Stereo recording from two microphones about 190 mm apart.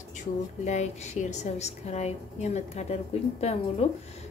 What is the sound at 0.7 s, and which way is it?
A woman's voice, 40° left (ahead or behind).